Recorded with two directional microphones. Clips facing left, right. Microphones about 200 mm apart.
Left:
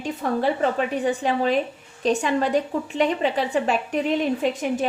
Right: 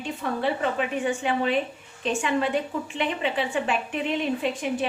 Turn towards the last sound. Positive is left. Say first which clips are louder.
# left 3 dB
turn(degrees=40)  # may be behind; listen again after turning